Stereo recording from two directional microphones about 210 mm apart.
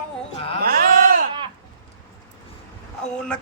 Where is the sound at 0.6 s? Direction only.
45° right (ahead or behind).